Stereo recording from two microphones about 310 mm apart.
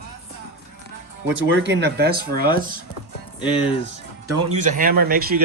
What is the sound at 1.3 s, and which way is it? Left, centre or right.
Speech, right.